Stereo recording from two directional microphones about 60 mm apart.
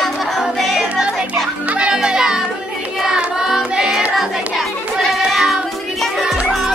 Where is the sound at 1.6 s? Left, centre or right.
Right.